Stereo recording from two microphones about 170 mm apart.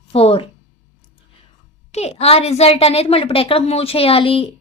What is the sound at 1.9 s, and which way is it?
Speech, 40° left (ahead or behind).